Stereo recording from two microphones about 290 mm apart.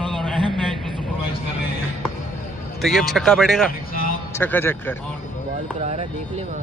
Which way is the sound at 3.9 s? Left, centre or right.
Left.